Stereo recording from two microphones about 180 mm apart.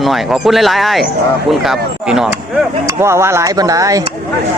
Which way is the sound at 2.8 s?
15° right (ahead or behind).